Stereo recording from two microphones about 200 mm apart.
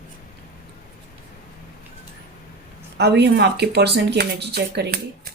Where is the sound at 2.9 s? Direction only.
60° right (ahead or behind).